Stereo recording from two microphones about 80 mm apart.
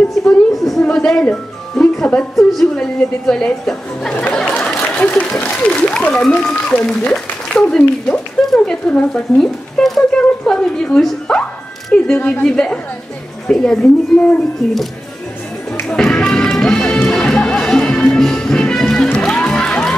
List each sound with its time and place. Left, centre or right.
0.2 s a sound: centre
0.8 s music: centre
2.3 s speech: centre
4.1 s chatter: centre
4.6 s speech: centre
15.8 s music: centre